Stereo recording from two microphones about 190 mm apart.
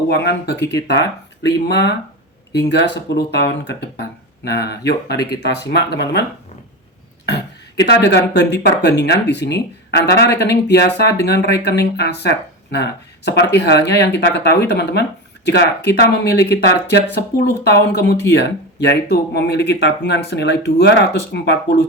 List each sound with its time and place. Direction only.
0.2 s speech: 60° left (ahead or behind)
7.8 s speech: 60° left (ahead or behind)